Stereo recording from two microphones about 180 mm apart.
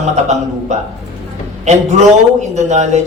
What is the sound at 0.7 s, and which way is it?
Speech, 40° right (ahead or behind).